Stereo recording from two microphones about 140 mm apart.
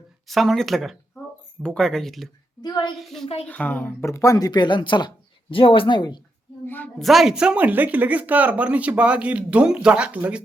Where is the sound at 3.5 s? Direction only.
10° left (ahead or behind); by 6.2 s 30° left (ahead or behind).